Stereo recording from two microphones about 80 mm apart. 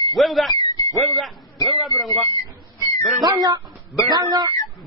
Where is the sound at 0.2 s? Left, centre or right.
Centre.